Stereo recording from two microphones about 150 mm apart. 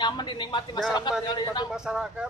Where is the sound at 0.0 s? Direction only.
30° left (ahead or behind).